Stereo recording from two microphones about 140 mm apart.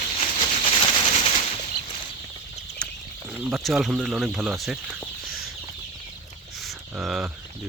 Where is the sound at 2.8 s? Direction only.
5° left (ahead or behind).